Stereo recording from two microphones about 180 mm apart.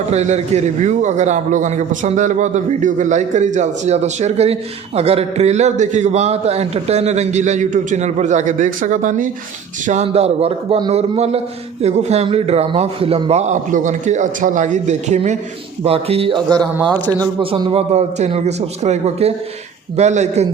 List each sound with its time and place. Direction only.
0.1 s a man's voice: 40° right (ahead or behind)